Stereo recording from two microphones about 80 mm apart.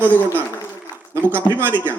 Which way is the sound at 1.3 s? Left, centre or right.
Right.